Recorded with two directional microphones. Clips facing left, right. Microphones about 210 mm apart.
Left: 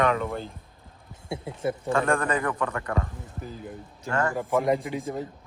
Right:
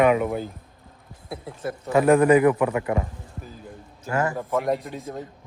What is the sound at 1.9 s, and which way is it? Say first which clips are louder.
Speech: right 10 dB; 10° right (ahead or behind).